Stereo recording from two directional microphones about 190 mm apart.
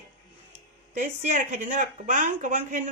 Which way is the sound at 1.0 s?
40° right (ahead or behind).